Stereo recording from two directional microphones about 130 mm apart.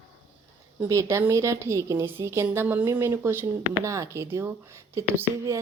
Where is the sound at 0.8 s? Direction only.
20° right (ahead or behind).